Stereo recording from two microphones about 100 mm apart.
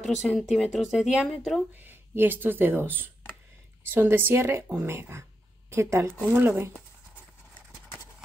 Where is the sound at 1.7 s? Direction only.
20° right (ahead or behind).